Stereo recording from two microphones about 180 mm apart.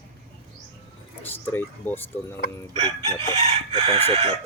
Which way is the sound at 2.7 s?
35° right (ahead or behind).